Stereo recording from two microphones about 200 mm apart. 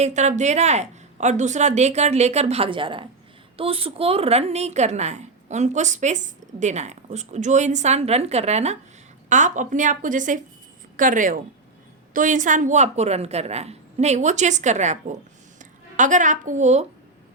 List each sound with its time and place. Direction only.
0.0 s a woman's voice: 35° right (ahead or behind)